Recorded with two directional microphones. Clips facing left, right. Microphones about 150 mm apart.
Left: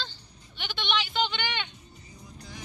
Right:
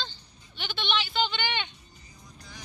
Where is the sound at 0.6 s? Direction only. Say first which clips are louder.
Even; 15° left (ahead or behind).